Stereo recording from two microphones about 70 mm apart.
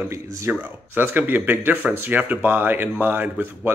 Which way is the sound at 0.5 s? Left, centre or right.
Right.